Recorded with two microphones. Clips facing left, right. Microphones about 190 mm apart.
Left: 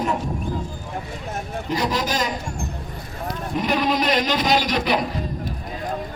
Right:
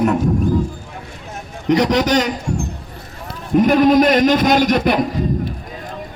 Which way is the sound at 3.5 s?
50° right (ahead or behind).